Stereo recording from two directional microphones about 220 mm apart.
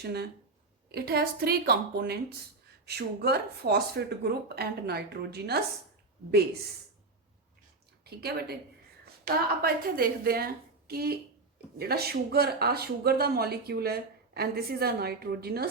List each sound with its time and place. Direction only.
0.0 s speech: 45° right (ahead or behind)
8.0 s speech: 45° right (ahead or behind)